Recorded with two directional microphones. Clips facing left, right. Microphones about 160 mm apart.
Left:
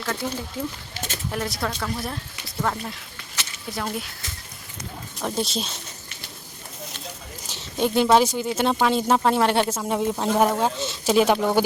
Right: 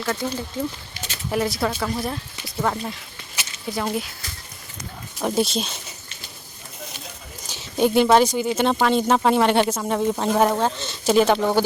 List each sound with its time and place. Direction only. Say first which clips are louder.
0.2 s speech: right 2 dB; 5° left (ahead or behind)
1.0 s a sound: left 3 dB; 15° right (ahead or behind)
1.3 s speech: right 6 dB; 5° right (ahead or behind)
5.2 s speech: right 5 dB; centre (ahead or behind)
7.4 s speech: right 4 dB; centre (ahead or behind)